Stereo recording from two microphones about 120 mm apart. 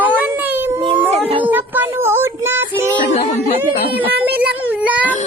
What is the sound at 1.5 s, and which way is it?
Child singing, 15° right (ahead or behind).